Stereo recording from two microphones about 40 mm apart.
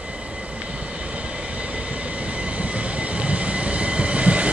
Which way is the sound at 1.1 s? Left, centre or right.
Right.